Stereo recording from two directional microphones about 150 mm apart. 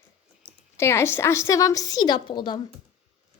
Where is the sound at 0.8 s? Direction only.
20° left (ahead or behind).